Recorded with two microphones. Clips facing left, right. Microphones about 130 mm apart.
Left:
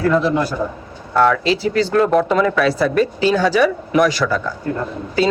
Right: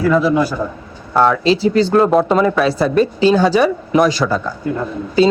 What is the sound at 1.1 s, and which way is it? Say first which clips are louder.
A woman's voice: right 2 dB; 25° right (ahead or behind).